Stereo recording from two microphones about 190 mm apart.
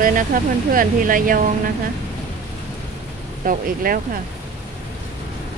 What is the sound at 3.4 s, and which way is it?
Speech, 45° right (ahead or behind).